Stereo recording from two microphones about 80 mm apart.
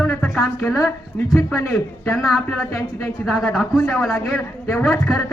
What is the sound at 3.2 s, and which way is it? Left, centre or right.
Speech, centre.